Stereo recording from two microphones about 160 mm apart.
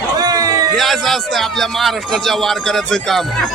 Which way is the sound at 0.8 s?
Centre (ahead or behind).